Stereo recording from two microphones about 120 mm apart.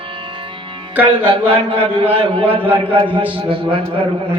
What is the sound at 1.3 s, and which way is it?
Speech, 50° right (ahead or behind).